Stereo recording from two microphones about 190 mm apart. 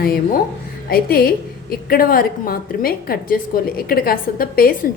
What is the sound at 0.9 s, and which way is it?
A woman's voice, 50° left (ahead or behind).